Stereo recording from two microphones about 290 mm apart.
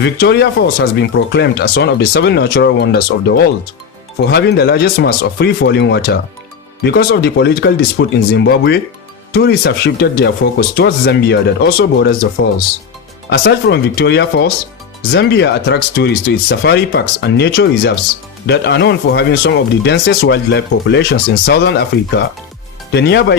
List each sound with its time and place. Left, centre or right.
0.0 s speech: left